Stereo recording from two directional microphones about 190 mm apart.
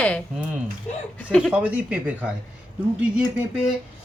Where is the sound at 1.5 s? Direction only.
10° right (ahead or behind).